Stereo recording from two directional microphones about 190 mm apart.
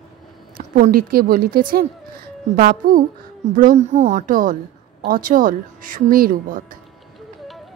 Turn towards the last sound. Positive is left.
turn(degrees=-45)  # may be behind; listen again after turning